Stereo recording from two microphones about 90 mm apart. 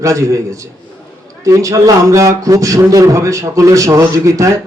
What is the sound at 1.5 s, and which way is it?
A man's voice, 40° right (ahead or behind).